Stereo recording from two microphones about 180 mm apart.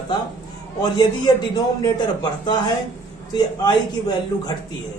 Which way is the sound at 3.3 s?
20° left (ahead or behind).